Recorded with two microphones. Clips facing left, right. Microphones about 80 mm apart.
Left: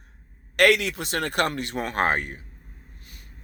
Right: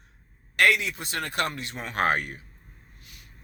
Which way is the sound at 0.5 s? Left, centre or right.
Left.